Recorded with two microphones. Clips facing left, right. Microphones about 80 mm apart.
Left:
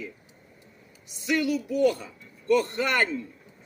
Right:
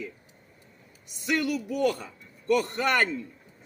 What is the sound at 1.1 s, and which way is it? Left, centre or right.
Speech, right.